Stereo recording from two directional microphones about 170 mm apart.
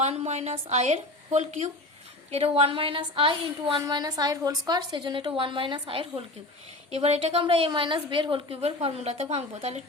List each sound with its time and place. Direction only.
0.0 s a woman's voice: 40° right (ahead or behind)